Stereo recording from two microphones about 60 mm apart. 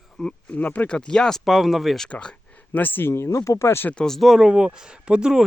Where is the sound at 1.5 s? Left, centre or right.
Centre.